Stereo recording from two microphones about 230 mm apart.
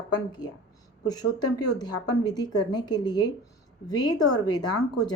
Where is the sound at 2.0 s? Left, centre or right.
Centre.